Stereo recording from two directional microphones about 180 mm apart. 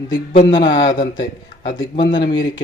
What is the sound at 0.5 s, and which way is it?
Speech, 25° left (ahead or behind).